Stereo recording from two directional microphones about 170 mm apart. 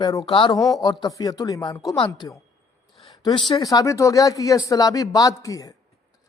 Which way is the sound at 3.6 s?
20° left (ahead or behind).